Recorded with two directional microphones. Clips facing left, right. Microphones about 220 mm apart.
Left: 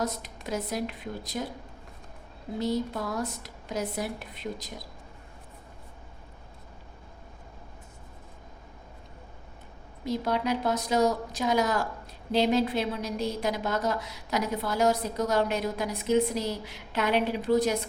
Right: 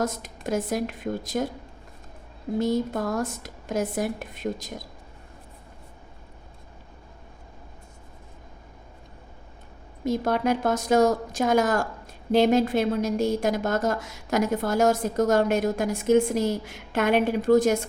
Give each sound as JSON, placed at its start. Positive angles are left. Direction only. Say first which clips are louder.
{"t": 0.0, "sound": "a woman's voice", "louder": "right 4 dB", "side_deg": -45}
{"t": 2.6, "sound": "a woman's voice", "louder": "right 4 dB", "side_deg": -50}
{"t": 10.0, "sound": "a woman's voice", "louder": "right 4 dB", "side_deg": -50}